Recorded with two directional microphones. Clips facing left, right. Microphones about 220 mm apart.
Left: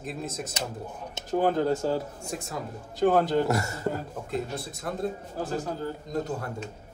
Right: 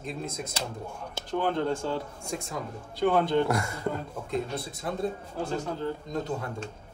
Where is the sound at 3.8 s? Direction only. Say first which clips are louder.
Left 1 dB; 5° left (ahead or behind).